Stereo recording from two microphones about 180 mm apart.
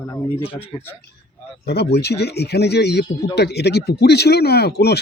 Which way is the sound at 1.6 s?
65° left (ahead or behind).